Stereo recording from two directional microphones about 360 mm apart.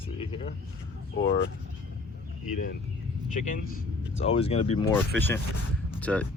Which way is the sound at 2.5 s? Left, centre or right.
Left.